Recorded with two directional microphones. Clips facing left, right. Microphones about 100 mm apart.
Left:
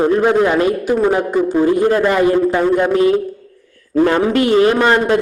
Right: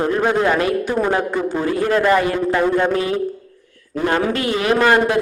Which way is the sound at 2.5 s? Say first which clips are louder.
Left 2 dB; 15° left (ahead or behind).